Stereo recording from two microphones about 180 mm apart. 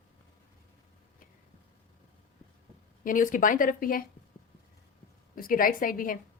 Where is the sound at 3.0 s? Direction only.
50° left (ahead or behind).